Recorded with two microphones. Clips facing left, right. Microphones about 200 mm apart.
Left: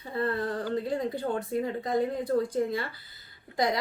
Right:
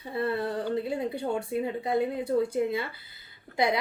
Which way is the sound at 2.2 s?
25° right (ahead or behind).